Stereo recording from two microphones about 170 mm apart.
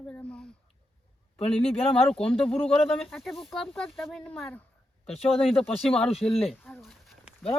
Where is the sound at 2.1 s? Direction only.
5° left (ahead or behind).